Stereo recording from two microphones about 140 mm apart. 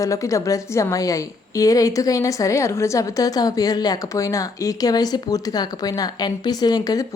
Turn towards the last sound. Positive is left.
turn(degrees=25)  # may be behind; listen again after turning